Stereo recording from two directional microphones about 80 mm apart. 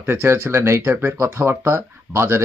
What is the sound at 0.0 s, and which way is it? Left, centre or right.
Speech, right.